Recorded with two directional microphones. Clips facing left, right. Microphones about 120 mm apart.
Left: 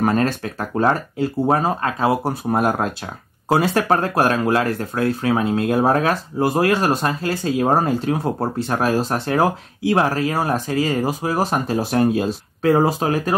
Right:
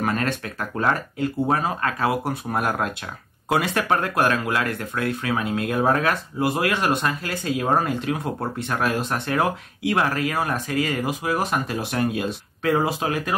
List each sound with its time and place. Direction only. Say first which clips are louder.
0.0 s speech: left 6 dB; 30° left (ahead or behind)